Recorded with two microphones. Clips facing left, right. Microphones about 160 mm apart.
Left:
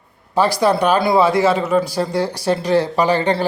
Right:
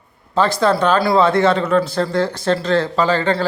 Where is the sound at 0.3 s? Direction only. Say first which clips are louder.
Even; 10° left (ahead or behind).